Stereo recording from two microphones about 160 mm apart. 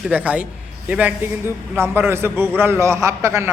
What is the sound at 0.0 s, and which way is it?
A man's voice, 10° right (ahead or behind).